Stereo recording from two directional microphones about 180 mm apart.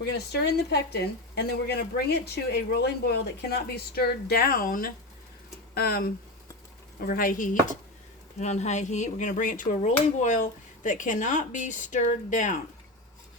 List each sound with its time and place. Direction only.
0.0 s speech: 70° left (ahead or behind); by 12.5 s 45° left (ahead or behind)